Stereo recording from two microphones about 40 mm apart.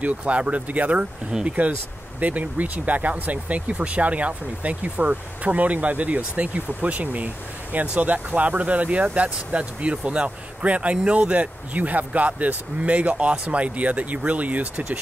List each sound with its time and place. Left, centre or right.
0.0 s speech: right
2.1 s speech: right